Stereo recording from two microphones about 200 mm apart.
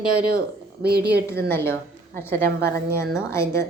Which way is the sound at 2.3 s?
55° right (ahead or behind).